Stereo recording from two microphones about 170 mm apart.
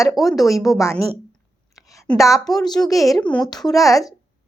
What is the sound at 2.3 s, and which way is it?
Speech, centre (ahead or behind).